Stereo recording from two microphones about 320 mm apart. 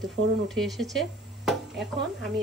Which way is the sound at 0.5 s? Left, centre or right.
Centre.